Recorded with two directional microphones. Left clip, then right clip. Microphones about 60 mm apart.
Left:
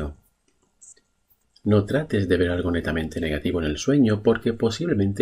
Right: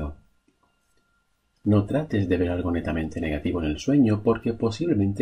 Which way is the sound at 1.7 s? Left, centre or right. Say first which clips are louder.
Left 3 dB; centre.